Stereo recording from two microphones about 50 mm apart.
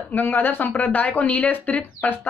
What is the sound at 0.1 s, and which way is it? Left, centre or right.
Speech, left.